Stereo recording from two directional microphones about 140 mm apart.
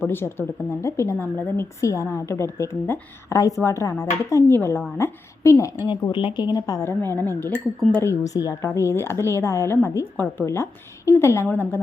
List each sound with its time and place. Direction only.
0.0 s a woman's voice: 15° left (ahead or behind)
5.8 s speech: 35° left (ahead or behind); by 11.8 s 15° left (ahead or behind)